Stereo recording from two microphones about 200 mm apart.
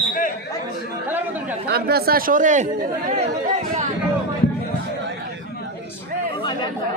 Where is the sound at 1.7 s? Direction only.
50° right (ahead or behind).